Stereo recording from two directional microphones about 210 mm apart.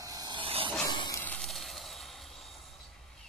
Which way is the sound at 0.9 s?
20° left (ahead or behind).